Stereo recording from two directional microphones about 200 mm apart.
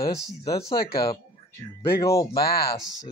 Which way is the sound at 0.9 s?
50° left (ahead or behind).